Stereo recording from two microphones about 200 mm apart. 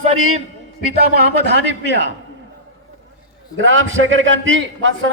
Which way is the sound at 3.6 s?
70° right (ahead or behind).